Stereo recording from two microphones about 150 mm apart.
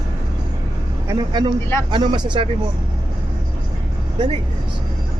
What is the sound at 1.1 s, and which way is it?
Speech, 30° right (ahead or behind).